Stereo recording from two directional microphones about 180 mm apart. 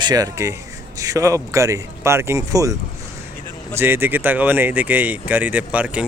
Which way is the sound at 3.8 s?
10° right (ahead or behind).